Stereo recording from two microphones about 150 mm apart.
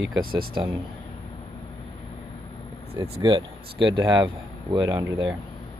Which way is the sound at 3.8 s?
30° right (ahead or behind).